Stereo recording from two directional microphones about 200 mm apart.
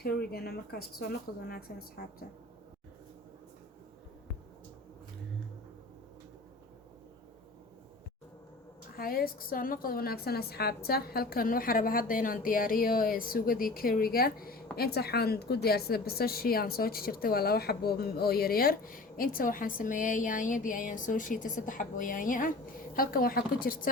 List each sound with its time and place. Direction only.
0.0 s a woman's voice: 50° left (ahead or behind)
9.0 s a woman's voice: 45° left (ahead or behind)